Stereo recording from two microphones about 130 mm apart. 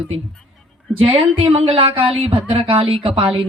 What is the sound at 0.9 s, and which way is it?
Speech, 45° right (ahead or behind).